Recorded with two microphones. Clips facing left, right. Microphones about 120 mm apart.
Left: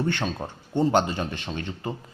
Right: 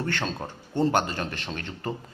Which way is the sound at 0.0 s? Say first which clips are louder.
Left 3 dB; 15° left (ahead or behind).